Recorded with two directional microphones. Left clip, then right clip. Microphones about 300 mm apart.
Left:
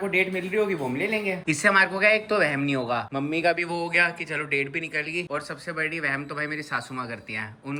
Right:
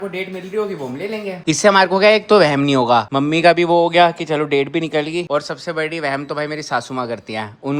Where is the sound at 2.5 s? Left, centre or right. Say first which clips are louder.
Right 12 dB; right.